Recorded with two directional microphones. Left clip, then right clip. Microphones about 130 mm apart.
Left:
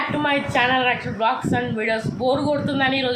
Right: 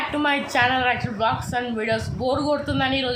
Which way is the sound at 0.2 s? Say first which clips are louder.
Even; 10° right (ahead or behind).